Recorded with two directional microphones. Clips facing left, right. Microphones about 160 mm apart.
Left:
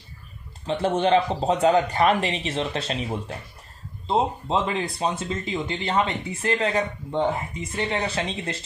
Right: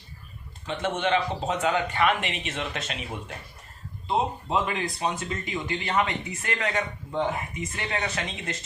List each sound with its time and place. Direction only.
0.7 s speech: 30° left (ahead or behind)